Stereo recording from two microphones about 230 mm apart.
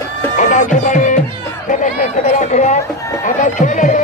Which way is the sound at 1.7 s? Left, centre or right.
Left.